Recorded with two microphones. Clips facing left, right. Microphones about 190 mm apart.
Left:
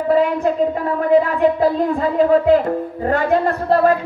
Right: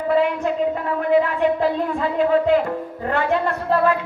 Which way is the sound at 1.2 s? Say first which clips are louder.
Left 4 dB; 40° left (ahead or behind).